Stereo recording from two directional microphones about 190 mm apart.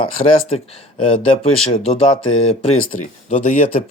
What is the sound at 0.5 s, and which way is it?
Speech, 30° left (ahead or behind).